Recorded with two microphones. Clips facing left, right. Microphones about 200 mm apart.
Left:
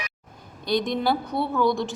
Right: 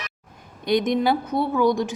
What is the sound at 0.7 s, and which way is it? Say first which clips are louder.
A woman's voice: right 3 dB; 20° right (ahead or behind).